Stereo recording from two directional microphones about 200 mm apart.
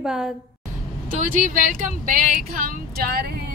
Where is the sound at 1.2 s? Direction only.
40° right (ahead or behind).